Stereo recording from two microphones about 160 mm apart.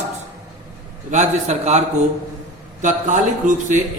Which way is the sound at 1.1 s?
45° right (ahead or behind).